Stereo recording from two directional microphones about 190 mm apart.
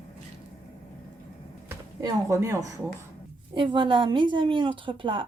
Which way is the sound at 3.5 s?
25° right (ahead or behind).